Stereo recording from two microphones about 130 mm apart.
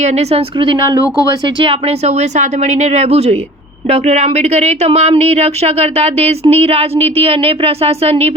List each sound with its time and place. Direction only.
0.0 s speech: 55° right (ahead or behind)
1.6 s a woman's voice: 55° right (ahead or behind)